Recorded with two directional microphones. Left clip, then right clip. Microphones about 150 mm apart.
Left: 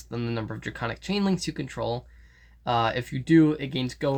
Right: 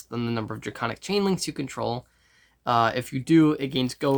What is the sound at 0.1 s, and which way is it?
Speech, 25° right (ahead or behind).